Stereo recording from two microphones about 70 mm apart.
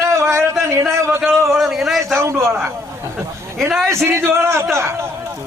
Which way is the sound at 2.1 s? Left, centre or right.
Right.